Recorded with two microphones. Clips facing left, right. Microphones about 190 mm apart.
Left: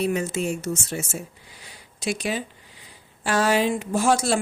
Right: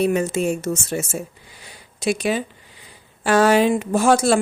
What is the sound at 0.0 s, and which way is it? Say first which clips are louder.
A woman's voice: right 5 dB; 55° right (ahead or behind).